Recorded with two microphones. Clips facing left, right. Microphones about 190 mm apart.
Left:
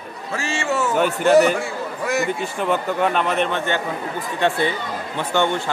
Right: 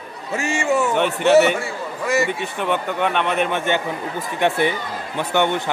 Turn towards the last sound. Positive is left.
turn(degrees=-15)  # may be behind; listen again after turning